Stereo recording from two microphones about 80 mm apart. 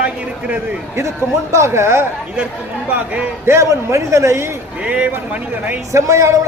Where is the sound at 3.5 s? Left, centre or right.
Right.